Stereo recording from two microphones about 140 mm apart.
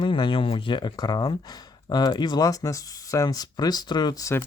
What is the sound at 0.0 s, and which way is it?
Speech, 35° left (ahead or behind).